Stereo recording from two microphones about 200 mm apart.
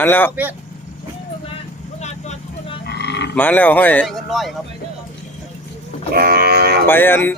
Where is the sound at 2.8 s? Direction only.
55° left (ahead or behind).